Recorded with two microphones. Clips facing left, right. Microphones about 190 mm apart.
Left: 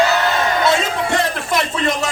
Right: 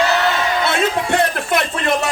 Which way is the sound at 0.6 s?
60° right (ahead or behind).